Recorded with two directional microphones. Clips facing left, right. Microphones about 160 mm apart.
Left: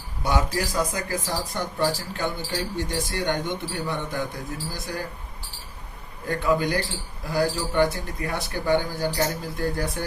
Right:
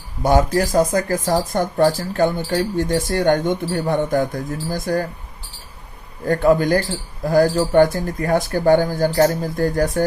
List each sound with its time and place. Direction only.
0.2 s speech: 45° right (ahead or behind)
6.2 s speech: 45° right (ahead or behind)